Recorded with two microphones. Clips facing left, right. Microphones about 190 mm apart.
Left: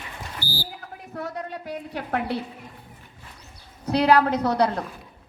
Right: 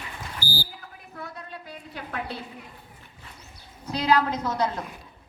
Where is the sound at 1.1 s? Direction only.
70° left (ahead or behind).